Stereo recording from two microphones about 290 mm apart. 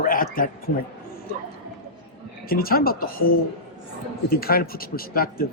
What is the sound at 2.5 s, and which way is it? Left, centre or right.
Speech, left.